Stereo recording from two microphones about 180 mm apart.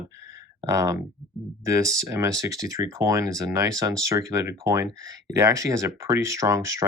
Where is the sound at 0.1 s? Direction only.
15° right (ahead or behind).